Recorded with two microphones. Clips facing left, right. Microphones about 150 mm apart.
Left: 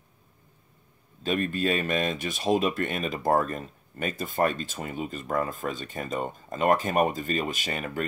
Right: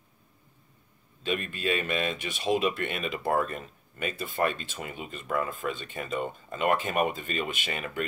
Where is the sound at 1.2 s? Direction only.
40° left (ahead or behind).